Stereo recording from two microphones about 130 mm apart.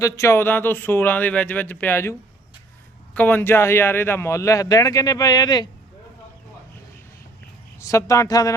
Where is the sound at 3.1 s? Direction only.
15° left (ahead or behind); by 5.7 s 35° left (ahead or behind).